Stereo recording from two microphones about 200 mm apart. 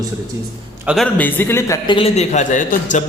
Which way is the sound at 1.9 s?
30° left (ahead or behind).